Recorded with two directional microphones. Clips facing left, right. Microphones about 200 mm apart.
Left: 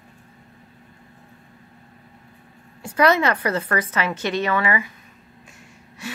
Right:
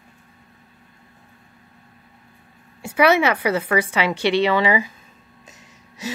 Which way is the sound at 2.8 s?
10° right (ahead or behind).